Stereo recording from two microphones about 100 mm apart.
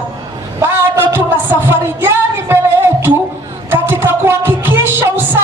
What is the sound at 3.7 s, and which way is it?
Music, 20° right (ahead or behind).